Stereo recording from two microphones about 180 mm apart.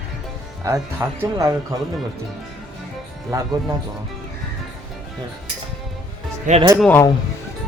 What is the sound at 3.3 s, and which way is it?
Speech, 20° right (ahead or behind).